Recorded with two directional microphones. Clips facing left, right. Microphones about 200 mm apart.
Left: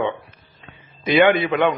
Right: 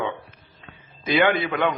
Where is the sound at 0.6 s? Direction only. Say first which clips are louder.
Left 1 dB; 20° left (ahead or behind).